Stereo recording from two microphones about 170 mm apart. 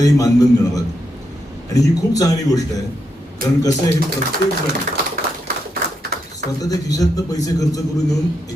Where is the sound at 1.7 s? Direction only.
20° left (ahead or behind).